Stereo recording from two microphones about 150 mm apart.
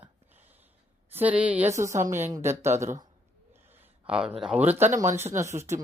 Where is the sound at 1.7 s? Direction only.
20° right (ahead or behind).